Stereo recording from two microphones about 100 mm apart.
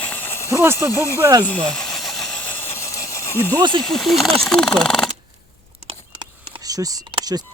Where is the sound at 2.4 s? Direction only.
20° left (ahead or behind).